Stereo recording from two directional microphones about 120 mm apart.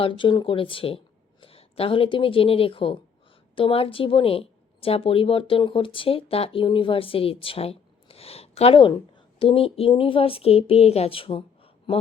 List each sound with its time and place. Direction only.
0.0 s a woman's voice: 45° left (ahead or behind)